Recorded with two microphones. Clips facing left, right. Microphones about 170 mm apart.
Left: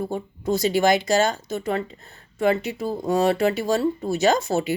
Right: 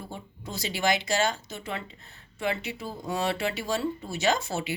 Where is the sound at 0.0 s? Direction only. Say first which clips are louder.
Left 13 dB; 50° left (ahead or behind).